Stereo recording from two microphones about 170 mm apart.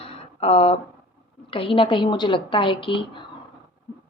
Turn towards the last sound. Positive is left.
turn(degrees=30)  # may be behind; listen again after turning